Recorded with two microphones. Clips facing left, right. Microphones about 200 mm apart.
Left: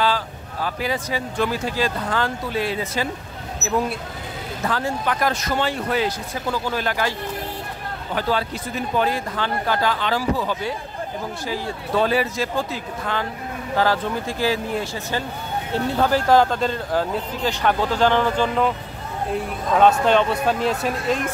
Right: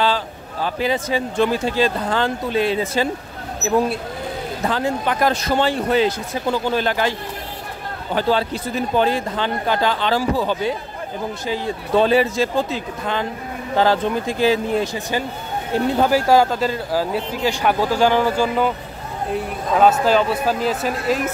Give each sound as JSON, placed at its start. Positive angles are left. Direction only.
{"t": 0.7, "sound": "speech", "side_deg": -25}
{"t": 4.6, "sound": "speech", "side_deg": -25}